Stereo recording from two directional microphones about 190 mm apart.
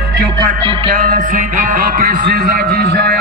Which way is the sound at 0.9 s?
45° right (ahead or behind).